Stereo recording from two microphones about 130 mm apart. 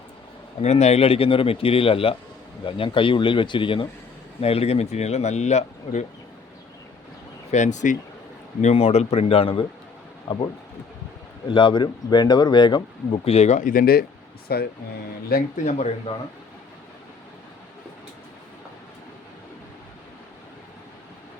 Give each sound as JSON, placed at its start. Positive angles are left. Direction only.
{"t": 0.6, "sound": "speech", "side_deg": 60}
{"t": 4.4, "sound": "speech", "side_deg": 50}
{"t": 7.5, "sound": "speech", "side_deg": 65}
{"t": 8.6, "sound": "speech", "side_deg": 50}
{"t": 11.4, "sound": "speech", "side_deg": 40}
{"t": 13.2, "sound": "speech", "side_deg": 55}
{"t": 15.5, "sound": "speech", "side_deg": 65}